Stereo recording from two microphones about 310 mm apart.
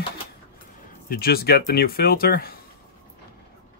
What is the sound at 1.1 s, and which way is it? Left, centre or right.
Speech, left.